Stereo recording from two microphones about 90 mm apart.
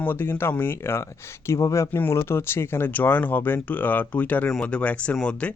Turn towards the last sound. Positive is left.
turn(degrees=10)  # may be behind; listen again after turning